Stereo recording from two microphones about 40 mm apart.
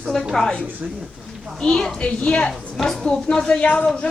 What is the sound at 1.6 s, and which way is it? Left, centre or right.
A woman's voice, centre.